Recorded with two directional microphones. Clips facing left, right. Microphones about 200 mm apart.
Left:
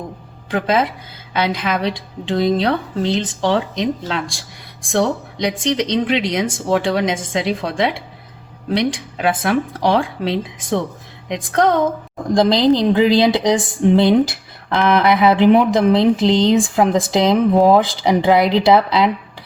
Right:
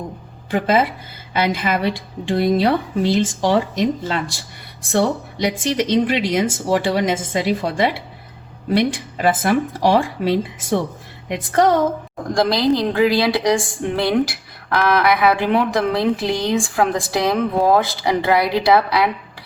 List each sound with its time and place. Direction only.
0.5 s speech: 5° right (ahead or behind)
12.3 s a woman's voice: 20° left (ahead or behind)